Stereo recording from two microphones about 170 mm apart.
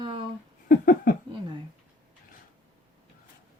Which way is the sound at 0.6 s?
55° left (ahead or behind).